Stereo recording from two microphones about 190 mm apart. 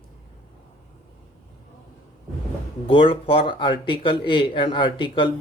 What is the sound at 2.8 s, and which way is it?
Speech, 30° left (ahead or behind).